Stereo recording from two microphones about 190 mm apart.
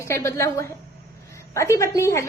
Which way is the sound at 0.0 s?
15° left (ahead or behind).